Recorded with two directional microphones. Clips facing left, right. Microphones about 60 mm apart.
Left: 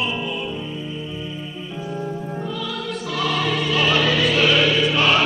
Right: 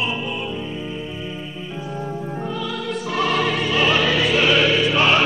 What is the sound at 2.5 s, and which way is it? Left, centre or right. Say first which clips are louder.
Music: right 2 dB; right.